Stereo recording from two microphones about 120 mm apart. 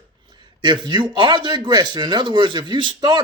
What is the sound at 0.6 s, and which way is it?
Speech, 40° right (ahead or behind).